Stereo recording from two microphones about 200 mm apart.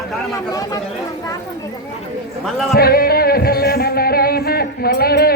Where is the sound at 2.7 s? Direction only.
50° left (ahead or behind).